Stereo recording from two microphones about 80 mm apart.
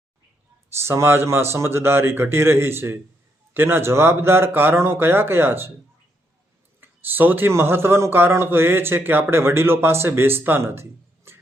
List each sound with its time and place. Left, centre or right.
0.8 s speech: right
6.7 s speech: right